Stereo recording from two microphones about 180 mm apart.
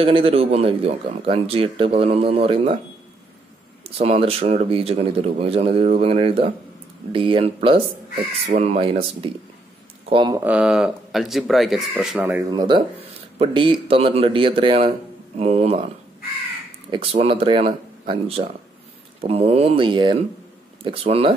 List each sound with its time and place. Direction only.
0.0 s speech: 30° right (ahead or behind)
3.8 s speech: 35° right (ahead or behind)
10.4 s speech: 5° right (ahead or behind)
12.4 s speech: 25° right (ahead or behind)
16.9 s speech: 30° right (ahead or behind)